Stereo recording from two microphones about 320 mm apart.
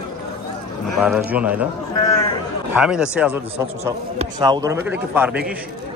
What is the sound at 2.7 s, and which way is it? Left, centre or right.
A man's voice, centre.